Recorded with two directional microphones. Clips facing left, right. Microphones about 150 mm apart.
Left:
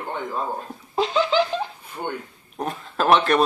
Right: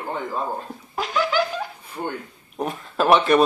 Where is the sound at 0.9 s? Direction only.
25° left (ahead or behind).